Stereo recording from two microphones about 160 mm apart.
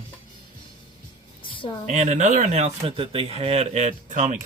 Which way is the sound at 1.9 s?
50° right (ahead or behind).